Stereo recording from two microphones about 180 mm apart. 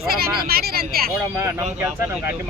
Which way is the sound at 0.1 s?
55° right (ahead or behind).